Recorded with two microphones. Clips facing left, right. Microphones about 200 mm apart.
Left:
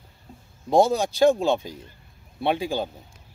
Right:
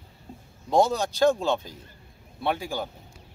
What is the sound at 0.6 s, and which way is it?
A man's voice, 10° left (ahead or behind).